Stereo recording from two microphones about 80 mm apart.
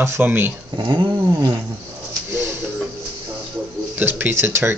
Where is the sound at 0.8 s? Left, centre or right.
Right.